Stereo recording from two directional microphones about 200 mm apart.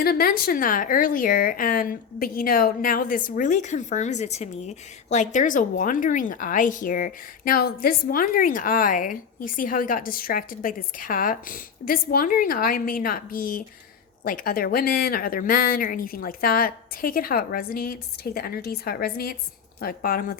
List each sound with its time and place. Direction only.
0.0 s a woman's voice: 50° left (ahead or behind)